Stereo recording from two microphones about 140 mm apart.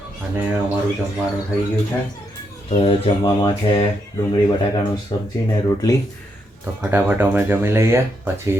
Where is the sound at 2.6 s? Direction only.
50° left (ahead or behind).